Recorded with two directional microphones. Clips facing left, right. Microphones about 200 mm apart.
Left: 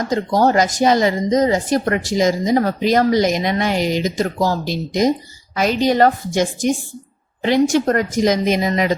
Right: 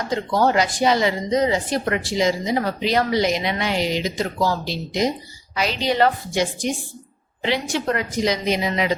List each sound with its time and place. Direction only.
0.1 s speech: 40° left (ahead or behind)